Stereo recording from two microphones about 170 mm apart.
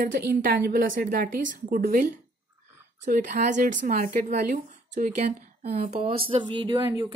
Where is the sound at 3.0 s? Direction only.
50° right (ahead or behind); by 6.8 s 30° right (ahead or behind).